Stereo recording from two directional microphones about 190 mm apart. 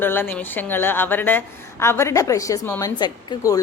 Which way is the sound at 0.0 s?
10° left (ahead or behind).